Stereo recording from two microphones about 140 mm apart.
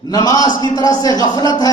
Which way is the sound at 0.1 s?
30° left (ahead or behind).